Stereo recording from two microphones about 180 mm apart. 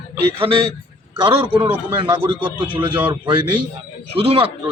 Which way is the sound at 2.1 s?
25° right (ahead or behind).